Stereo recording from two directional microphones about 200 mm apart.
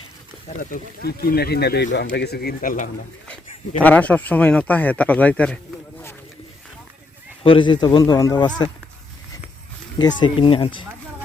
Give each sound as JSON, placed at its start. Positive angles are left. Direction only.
{"t": 0.4, "sound": "speech", "side_deg": 45}
{"t": 3.8, "sound": "speech", "side_deg": 5}
{"t": 7.4, "sound": "a man's voice", "side_deg": 25}
{"t": 10.0, "sound": "a man's voice", "side_deg": 20}